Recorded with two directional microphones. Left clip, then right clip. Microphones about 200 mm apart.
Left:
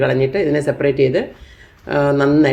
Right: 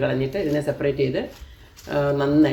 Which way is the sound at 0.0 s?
20° left (ahead or behind).